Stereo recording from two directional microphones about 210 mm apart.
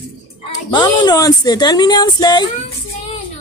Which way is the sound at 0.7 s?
20° left (ahead or behind).